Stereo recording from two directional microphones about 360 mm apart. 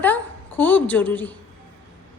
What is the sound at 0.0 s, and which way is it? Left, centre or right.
A woman's voice, centre.